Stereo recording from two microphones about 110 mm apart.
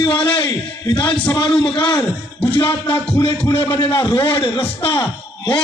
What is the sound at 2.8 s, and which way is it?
A man's voice, 55° left (ahead or behind).